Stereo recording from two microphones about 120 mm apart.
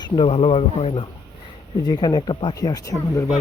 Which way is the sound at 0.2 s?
55° left (ahead or behind).